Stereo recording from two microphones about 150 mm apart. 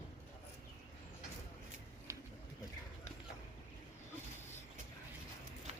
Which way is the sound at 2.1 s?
20° right (ahead or behind).